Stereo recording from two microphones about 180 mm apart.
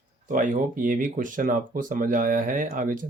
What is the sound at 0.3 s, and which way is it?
Speech, 45° right (ahead or behind).